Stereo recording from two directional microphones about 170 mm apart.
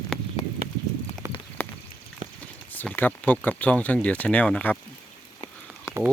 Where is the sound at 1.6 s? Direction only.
15° left (ahead or behind).